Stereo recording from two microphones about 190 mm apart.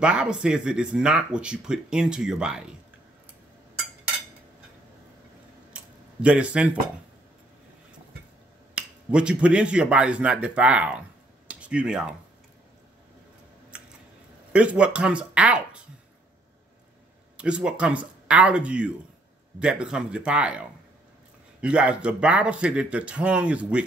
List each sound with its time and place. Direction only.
0.0 s speech: 5° right (ahead or behind)
5.7 s a sound: 5° right (ahead or behind)
6.2 s speech: 5° right (ahead or behind)
8.7 s speech: 5° right (ahead or behind)
14.5 s speech: 5° right (ahead or behind)
17.4 s speech: 5° right (ahead or behind)